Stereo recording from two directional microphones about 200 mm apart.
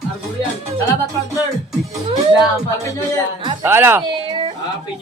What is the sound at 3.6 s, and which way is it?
Speech, 10° right (ahead or behind).